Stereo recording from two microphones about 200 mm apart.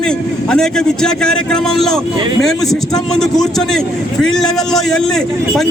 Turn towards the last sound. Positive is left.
turn(degrees=0)  # may be behind; listen again after turning